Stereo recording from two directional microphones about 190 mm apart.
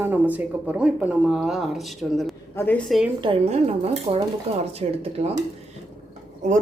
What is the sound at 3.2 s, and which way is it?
Speech, 30° right (ahead or behind).